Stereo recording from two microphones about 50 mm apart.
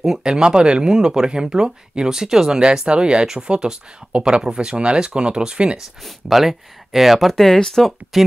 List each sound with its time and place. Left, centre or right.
0.0 s speech: centre
6.0 s speech: centre
8.1 s speech: centre